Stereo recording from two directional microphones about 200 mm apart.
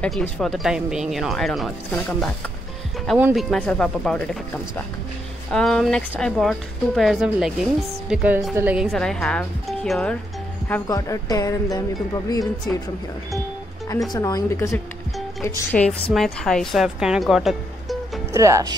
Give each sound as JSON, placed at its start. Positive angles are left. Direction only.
{"t": 0.0, "sound": "speech", "side_deg": 5}
{"t": 3.2, "sound": "speech", "side_deg": -10}
{"t": 3.4, "sound": "speech", "side_deg": 5}
{"t": 8.9, "sound": "speech", "side_deg": 5}
{"t": 10.9, "sound": "speech", "side_deg": 20}
{"t": 14.1, "sound": "a woman's voice", "side_deg": 20}
{"t": 18.3, "sound": "speech", "side_deg": -15}